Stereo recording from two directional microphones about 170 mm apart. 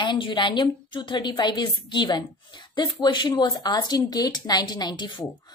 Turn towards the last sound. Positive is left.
turn(degrees=25)  # may be behind; listen again after turning